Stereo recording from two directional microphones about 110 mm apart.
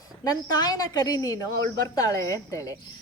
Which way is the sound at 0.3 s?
35° left (ahead or behind).